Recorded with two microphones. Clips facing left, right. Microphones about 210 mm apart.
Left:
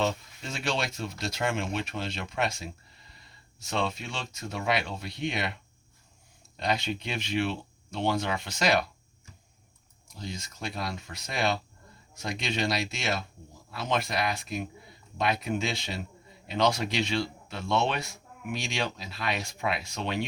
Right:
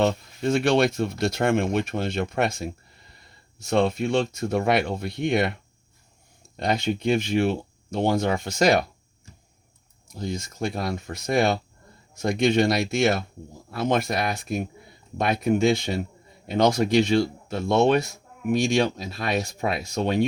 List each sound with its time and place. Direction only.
0.0 s speech: 55° right (ahead or behind)
6.6 s speech: 50° right (ahead or behind)
10.2 s speech: 50° right (ahead or behind)